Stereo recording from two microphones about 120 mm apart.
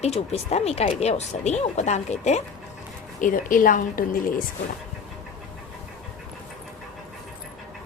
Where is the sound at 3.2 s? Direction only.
90° left.